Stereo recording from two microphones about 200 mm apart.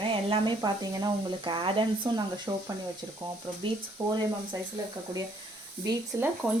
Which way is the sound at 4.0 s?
10° right (ahead or behind).